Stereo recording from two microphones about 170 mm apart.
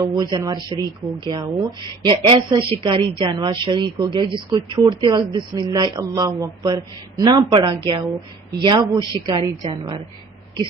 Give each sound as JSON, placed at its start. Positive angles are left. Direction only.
{"t": 0.0, "sound": "speech", "side_deg": -25}